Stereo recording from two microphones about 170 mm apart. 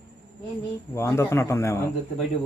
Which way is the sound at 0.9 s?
15° left (ahead or behind).